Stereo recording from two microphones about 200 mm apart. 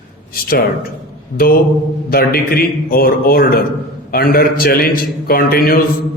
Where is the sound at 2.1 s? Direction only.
50° left (ahead or behind).